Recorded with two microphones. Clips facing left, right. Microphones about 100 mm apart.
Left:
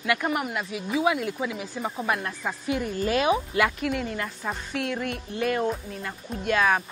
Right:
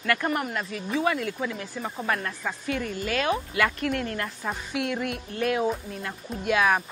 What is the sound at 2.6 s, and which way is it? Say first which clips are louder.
Speech: left 4 dB; 15° left (ahead or behind).